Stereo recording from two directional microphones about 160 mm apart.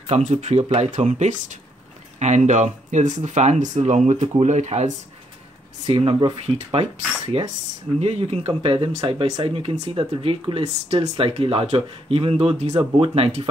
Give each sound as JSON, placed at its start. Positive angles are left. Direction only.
{"t": 0.0, "sound": "speech", "side_deg": -40}